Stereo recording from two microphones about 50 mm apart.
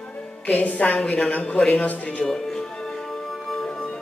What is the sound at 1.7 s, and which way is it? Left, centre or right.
Music, left.